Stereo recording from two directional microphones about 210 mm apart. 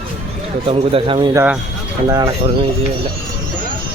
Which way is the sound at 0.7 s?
25° right (ahead or behind).